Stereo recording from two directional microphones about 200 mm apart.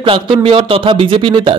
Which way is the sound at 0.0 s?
25° right (ahead or behind).